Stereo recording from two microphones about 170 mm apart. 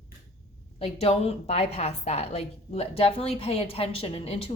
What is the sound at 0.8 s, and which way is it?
A woman's voice, 35° left (ahead or behind).